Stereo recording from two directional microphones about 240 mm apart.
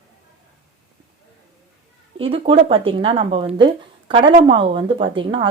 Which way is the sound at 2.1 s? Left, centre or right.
Right.